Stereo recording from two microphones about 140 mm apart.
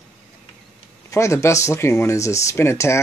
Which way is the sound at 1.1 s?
20° left (ahead or behind).